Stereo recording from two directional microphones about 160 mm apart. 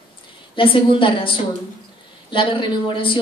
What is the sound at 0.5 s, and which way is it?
Speech, 35° left (ahead or behind).